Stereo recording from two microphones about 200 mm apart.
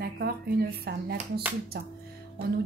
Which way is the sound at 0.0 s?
50° right (ahead or behind).